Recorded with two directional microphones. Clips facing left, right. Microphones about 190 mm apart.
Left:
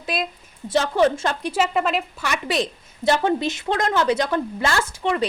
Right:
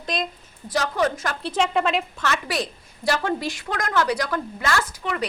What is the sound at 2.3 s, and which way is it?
A woman's voice, 20° left (ahead or behind).